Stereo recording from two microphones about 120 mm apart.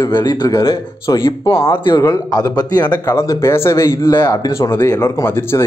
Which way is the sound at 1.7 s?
40° left (ahead or behind).